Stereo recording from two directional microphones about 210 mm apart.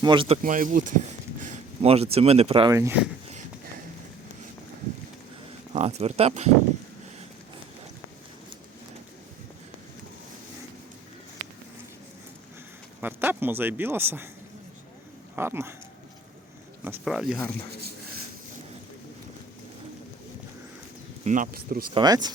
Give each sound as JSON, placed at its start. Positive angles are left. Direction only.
{"t": 0.0, "sound": "speech", "side_deg": -25}
{"t": 0.4, "sound": "speech", "side_deg": -40}
{"t": 2.7, "sound": "speech", "side_deg": -10}
{"t": 5.7, "sound": "speech", "side_deg": -30}
{"t": 13.0, "sound": "speech", "side_deg": -10}
{"t": 15.4, "sound": "speech", "side_deg": -10}
{"t": 16.8, "sound": "speech", "side_deg": -5}
{"t": 17.7, "sound": "speech", "side_deg": -50}
{"t": 21.2, "sound": "speech", "side_deg": -40}
{"t": 21.9, "sound": "speech", "side_deg": -20}